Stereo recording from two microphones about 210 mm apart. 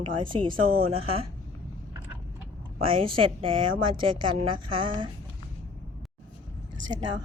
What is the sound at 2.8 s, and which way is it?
A woman's voice, 25° right (ahead or behind).